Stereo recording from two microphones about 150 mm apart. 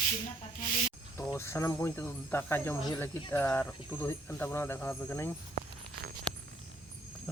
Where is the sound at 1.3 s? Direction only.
15° left (ahead or behind).